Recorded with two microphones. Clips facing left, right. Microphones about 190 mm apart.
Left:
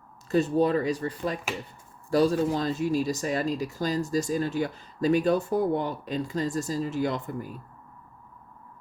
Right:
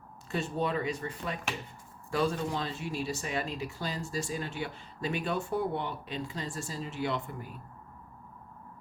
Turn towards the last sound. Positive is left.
turn(degrees=40)  # may be behind; listen again after turning